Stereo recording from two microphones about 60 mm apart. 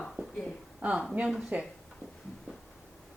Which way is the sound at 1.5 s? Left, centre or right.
Right.